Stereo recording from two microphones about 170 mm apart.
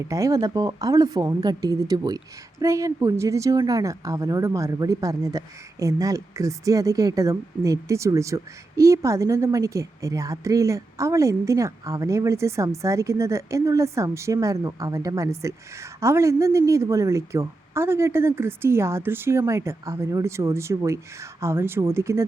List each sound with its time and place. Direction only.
0.0 s speech: 20° right (ahead or behind)